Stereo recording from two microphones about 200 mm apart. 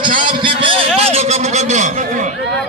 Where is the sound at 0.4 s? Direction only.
25° right (ahead or behind).